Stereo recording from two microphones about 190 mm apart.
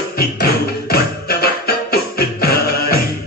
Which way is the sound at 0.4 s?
55° left (ahead or behind).